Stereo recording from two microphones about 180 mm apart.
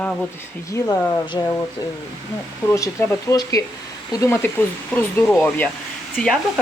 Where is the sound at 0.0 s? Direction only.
5° left (ahead or behind).